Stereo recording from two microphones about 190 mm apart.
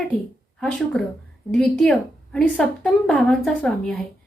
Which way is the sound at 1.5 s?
5° left (ahead or behind).